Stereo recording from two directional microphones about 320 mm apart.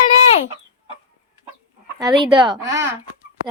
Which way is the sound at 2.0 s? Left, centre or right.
Centre.